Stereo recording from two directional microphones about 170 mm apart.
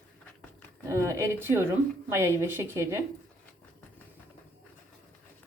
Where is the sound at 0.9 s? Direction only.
15° right (ahead or behind).